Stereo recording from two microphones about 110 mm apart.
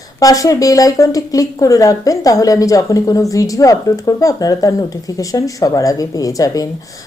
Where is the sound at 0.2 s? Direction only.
30° left (ahead or behind).